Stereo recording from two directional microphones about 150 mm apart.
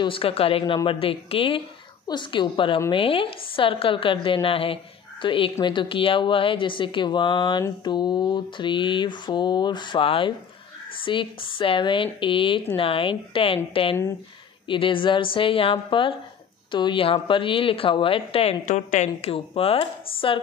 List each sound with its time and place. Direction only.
0.0 s mantra: 35° left (ahead or behind)
14.7 s mantra: 35° left (ahead or behind)